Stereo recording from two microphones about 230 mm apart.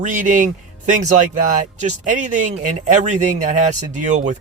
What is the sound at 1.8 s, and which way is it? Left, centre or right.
Speech, right.